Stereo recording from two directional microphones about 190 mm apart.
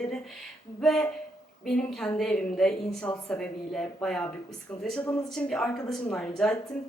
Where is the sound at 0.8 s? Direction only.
5° left (ahead or behind).